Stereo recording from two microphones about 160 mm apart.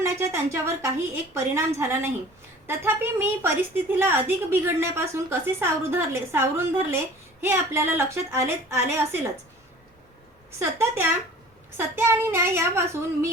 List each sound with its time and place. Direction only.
0.0 s a woman's voice: 20° right (ahead or behind)
10.6 s a woman's voice: 15° right (ahead or behind)